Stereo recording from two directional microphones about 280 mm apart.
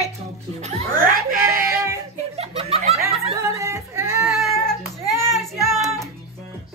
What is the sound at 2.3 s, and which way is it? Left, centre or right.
Laughter, right.